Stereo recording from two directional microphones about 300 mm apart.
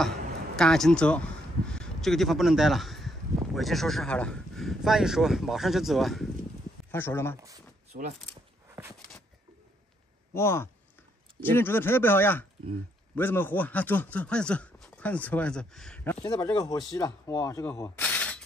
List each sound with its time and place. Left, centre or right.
0.6 s a man's voice: centre
7.9 s speech: right
10.3 s speech: centre